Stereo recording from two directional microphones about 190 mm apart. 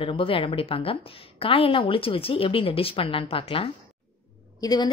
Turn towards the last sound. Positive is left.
turn(degrees=20)  # may be behind; listen again after turning